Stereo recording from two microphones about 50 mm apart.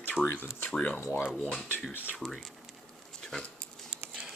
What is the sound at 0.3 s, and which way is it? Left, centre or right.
Speech, left.